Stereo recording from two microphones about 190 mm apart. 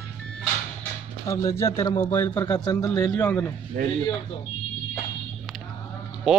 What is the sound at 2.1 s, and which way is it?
A man's voice, 15° left (ahead or behind).